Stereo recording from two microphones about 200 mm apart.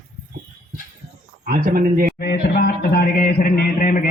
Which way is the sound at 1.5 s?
45° right (ahead or behind).